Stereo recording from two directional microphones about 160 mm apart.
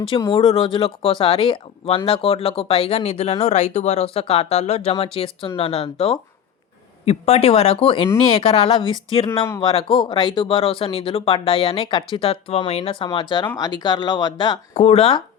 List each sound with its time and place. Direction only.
0.3 s speech: 35° left (ahead or behind)
14.7 s speech: 40° left (ahead or behind)